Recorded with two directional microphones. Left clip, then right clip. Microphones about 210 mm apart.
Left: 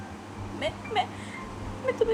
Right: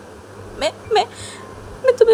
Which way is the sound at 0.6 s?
50° right (ahead or behind).